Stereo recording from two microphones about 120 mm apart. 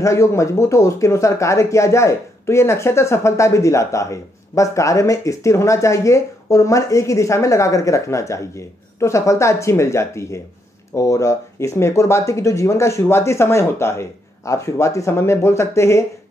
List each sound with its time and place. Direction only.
0.0 s speech: 25° left (ahead or behind)